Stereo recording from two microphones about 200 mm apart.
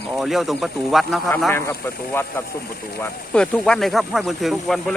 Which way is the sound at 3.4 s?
5° left (ahead or behind).